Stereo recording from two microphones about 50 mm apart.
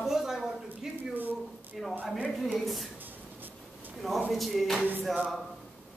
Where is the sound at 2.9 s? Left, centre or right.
Right.